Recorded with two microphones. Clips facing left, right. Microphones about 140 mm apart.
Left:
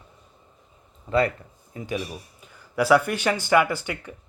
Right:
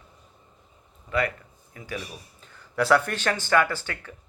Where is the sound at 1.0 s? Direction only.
30° left (ahead or behind).